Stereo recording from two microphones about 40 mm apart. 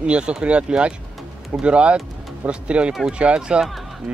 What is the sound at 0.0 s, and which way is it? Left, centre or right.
Speech, right.